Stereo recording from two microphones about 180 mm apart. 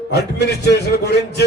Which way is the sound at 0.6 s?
65° left (ahead or behind).